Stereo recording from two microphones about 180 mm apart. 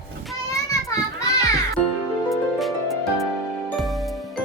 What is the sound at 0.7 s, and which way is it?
Children playing, 20° left (ahead or behind).